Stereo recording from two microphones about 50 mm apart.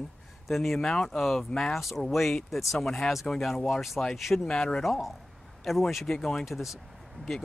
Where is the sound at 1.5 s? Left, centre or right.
Centre.